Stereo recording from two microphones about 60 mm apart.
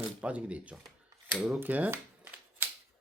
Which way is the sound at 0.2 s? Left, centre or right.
Right.